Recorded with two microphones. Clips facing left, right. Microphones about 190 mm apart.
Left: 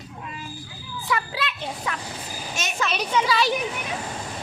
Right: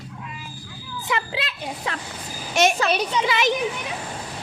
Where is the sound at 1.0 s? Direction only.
25° right (ahead or behind).